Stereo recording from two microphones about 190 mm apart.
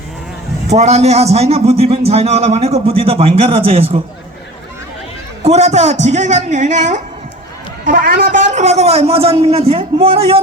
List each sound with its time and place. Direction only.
0.7 s a man's voice: 35° right (ahead or behind)
5.4 s a man's voice: 35° right (ahead or behind)